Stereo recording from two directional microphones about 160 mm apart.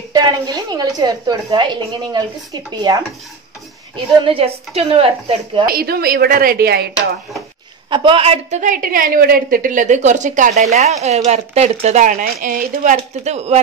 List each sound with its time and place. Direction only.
0.1 s a woman's voice: 25° right (ahead or behind)
3.9 s a woman's voice: 35° right (ahead or behind)
5.7 s a woman's voice: 75° right (ahead or behind)
7.9 s a woman's voice: 35° right (ahead or behind)